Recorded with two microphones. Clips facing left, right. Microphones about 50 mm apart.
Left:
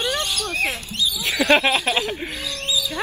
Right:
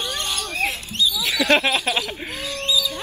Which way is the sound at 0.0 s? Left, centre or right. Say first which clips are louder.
Left 4 dB; left.